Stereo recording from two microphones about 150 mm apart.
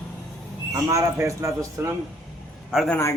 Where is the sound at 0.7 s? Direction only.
20° right (ahead or behind).